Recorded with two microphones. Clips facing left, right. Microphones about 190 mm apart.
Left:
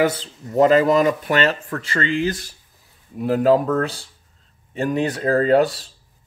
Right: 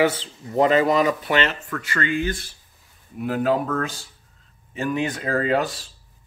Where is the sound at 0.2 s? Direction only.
40° left (ahead or behind).